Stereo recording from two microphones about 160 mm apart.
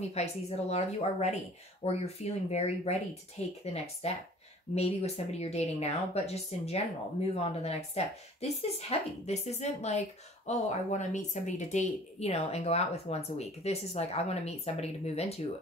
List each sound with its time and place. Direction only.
0.1 s a woman's voice: 45° left (ahead or behind)